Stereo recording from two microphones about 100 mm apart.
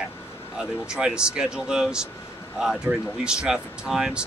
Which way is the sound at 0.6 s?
5° right (ahead or behind).